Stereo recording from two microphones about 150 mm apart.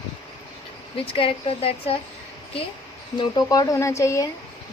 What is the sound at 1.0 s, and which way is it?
Speech, 40° left (ahead or behind).